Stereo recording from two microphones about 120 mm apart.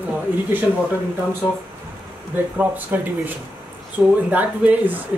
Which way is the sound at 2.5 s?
15° right (ahead or behind).